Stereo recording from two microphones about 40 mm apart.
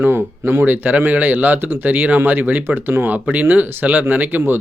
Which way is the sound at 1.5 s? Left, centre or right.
Right.